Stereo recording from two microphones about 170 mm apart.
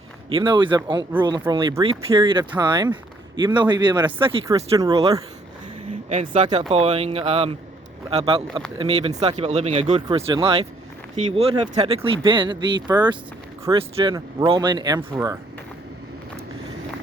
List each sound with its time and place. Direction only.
0.3 s speech: 30° right (ahead or behind)
4.4 s speech: 20° right (ahead or behind)
6.1 s speech: 45° right (ahead or behind)
6.5 s speech: 25° right (ahead or behind)
6.7 s speech: 35° right (ahead or behind); by 15.4 s 20° right (ahead or behind)